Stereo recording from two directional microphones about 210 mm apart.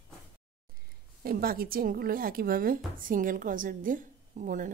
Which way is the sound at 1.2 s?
45° right (ahead or behind).